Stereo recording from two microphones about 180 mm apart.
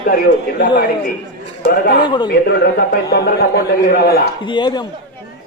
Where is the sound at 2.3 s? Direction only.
60° left (ahead or behind).